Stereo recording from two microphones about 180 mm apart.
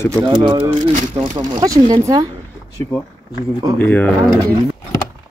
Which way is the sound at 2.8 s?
10° left (ahead or behind).